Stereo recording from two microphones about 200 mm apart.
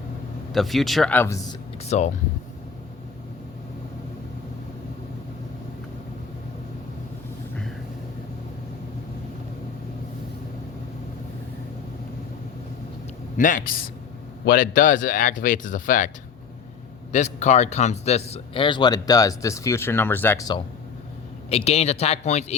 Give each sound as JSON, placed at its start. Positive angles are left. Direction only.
{"t": 0.5, "sound": "speech", "side_deg": 0}
{"t": 1.8, "sound": "speech", "side_deg": 35}
{"t": 13.3, "sound": "speech", "side_deg": 40}
{"t": 17.1, "sound": "speech", "side_deg": 35}
{"t": 21.5, "sound": "speech", "side_deg": 30}